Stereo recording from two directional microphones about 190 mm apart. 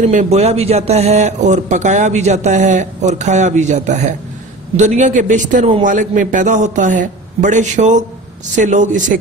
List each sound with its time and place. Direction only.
0.1 s speech: 35° right (ahead or behind)